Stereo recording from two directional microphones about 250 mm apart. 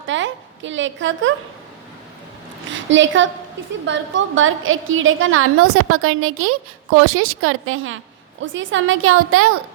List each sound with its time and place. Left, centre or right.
0.1 s a woman's voice: right
2.7 s a woman's voice: right